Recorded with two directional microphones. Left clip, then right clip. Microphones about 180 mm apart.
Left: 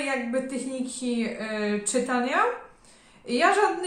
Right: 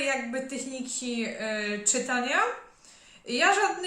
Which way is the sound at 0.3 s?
15° right (ahead or behind).